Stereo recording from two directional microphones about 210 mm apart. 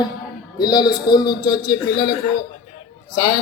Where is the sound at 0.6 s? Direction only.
20° left (ahead or behind).